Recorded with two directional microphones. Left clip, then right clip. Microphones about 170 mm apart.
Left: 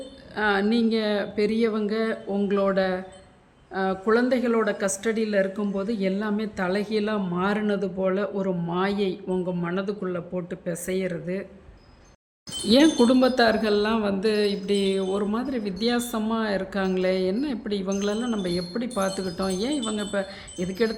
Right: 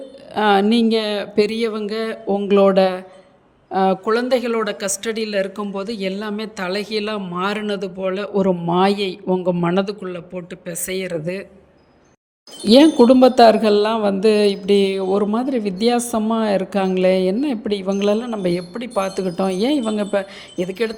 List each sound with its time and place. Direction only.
0.3 s speech: 35° right (ahead or behind)
12.6 s speech: 30° right (ahead or behind)